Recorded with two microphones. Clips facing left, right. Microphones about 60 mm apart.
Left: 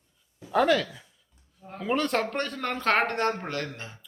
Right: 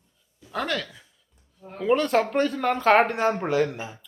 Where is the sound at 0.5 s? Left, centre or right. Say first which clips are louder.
Left 6 dB; centre.